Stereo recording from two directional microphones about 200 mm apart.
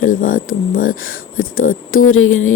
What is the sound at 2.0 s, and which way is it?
Speech, 90° left.